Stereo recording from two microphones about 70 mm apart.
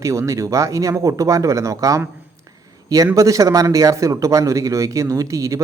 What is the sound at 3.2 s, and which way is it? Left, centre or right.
Speech, right.